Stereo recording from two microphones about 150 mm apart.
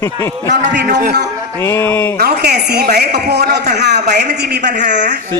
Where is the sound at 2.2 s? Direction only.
90° right.